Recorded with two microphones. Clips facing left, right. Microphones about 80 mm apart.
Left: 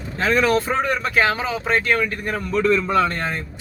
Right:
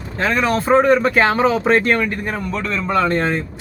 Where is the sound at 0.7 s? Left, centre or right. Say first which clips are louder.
Right 9 dB; right.